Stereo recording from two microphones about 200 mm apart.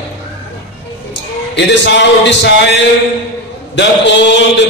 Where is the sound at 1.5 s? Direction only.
60° left (ahead or behind).